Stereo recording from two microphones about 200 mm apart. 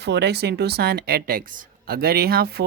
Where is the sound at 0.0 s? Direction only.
55° right (ahead or behind).